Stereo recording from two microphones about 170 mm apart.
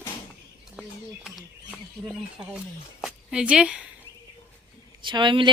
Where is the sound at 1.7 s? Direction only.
Centre (ahead or behind).